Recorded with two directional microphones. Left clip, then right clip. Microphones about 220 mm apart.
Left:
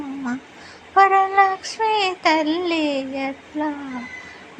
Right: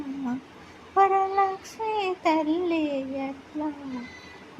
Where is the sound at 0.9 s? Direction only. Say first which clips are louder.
Left 7 dB; 5° left (ahead or behind).